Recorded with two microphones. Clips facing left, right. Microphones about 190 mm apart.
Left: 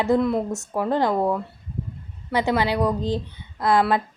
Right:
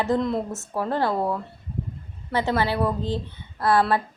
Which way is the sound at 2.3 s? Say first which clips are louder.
Left 2 dB; 15° left (ahead or behind).